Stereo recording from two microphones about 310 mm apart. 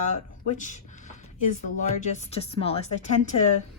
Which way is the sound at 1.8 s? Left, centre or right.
Left.